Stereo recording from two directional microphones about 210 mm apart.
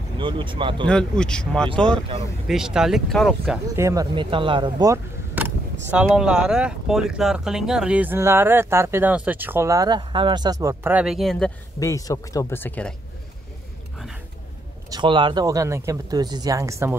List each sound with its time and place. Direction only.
0.2 s speech: 25° right (ahead or behind)
0.8 s speech: 5° left (ahead or behind)
3.7 s speech: 15° right (ahead or behind); by 11.5 s centre (ahead or behind)
11.8 s speech: 15° left (ahead or behind)
14.9 s speech: 20° right (ahead or behind)